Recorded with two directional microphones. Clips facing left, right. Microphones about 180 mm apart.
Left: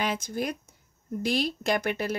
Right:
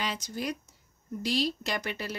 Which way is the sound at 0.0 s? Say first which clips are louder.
Left 4 dB; 50° left (ahead or behind).